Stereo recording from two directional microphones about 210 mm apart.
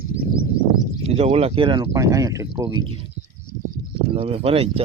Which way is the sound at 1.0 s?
30° right (ahead or behind).